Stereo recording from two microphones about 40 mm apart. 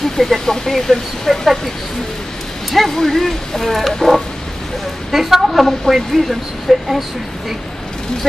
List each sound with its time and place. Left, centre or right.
0.2 s speech: centre
2.7 s speech: centre